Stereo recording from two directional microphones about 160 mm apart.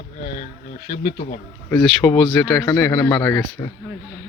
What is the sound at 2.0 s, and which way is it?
Speech, 10° left (ahead or behind).